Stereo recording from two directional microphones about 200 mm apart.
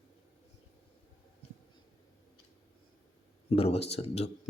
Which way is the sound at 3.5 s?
30° left (ahead or behind).